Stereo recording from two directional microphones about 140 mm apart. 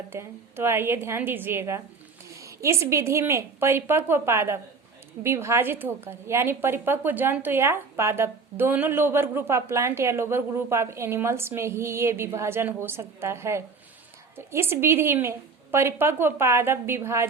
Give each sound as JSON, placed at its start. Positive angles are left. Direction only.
{"t": 0.1, "sound": "a woman's voice", "side_deg": -15}